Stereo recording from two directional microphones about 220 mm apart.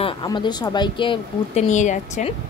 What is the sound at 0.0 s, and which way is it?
A woman's voice, 20° left (ahead or behind).